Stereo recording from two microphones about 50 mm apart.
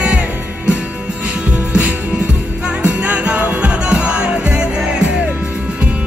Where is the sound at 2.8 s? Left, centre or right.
Right.